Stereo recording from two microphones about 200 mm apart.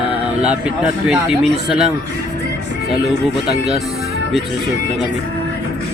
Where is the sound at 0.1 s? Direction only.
5° right (ahead or behind).